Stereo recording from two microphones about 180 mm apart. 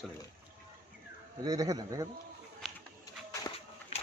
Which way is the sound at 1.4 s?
20° right (ahead or behind).